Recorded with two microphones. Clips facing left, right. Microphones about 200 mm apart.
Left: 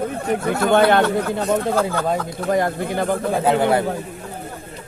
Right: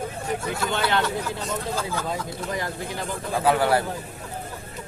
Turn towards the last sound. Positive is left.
turn(degrees=20)  # may be behind; listen again after turning